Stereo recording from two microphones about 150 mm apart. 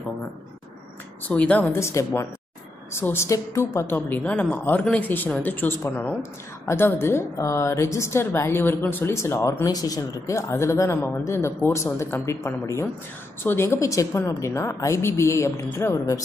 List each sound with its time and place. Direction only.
1.3 s a woman's voice: 10° left (ahead or behind)